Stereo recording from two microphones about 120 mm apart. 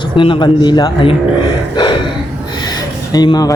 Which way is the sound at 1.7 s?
40° left (ahead or behind).